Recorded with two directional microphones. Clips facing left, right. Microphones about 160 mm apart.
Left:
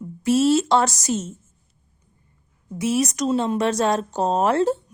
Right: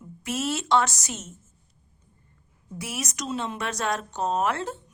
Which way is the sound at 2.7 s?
25° left (ahead or behind).